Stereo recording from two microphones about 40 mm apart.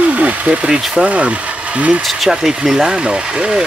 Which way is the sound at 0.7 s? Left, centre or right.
Centre.